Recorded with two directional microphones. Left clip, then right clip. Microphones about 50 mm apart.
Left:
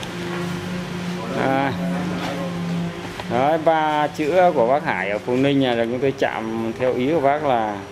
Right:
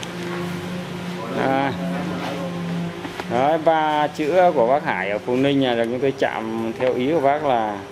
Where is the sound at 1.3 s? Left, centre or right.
Centre.